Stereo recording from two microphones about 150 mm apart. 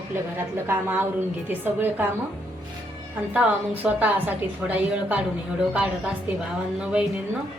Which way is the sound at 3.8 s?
5° right (ahead or behind).